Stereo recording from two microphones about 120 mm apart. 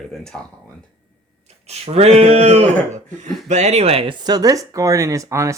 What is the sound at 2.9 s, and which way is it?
Speech, 80° right.